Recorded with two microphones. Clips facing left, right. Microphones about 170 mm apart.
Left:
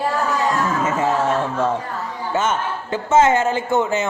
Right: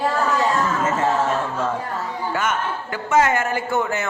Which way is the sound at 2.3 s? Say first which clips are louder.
Left 4 dB; 25° left (ahead or behind).